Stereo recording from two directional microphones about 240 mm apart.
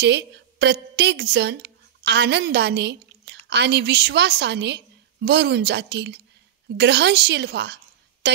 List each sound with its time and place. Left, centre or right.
0.0 s a woman's voice: right